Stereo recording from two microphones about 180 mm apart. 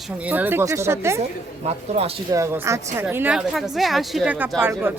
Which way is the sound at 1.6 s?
35° right (ahead or behind).